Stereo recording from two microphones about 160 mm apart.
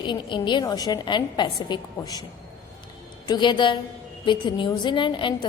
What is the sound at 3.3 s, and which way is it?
A woman's voice, 30° left (ahead or behind).